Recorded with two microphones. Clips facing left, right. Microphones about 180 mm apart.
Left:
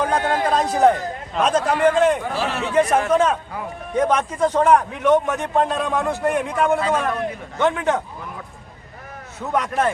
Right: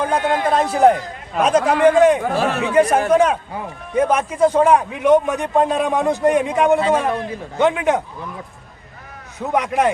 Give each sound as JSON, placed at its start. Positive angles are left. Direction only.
{"t": 0.0, "sound": "a man's voice", "side_deg": -15}
{"t": 2.2, "sound": "speech", "side_deg": -50}
{"t": 3.1, "sound": "a man's voice", "side_deg": -10}
{"t": 7.6, "sound": "a man's voice", "side_deg": -15}
{"t": 9.4, "sound": "a man's voice", "side_deg": -15}